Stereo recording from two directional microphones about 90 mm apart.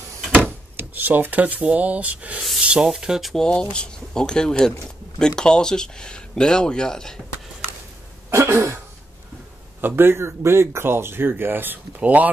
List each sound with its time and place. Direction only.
0.3 s speech: 20° right (ahead or behind); by 7.2 s 5° left (ahead or behind)
8.3 s throat clearing: 30° right (ahead or behind)
9.8 s speech: 25° right (ahead or behind)